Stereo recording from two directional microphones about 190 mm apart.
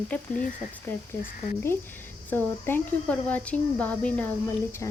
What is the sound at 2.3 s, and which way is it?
Speech, 10° left (ahead or behind).